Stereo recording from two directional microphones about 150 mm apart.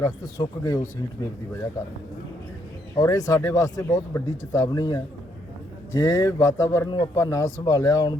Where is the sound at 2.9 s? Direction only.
20° left (ahead or behind).